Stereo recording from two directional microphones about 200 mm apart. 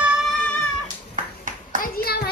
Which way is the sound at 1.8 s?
50° left (ahead or behind).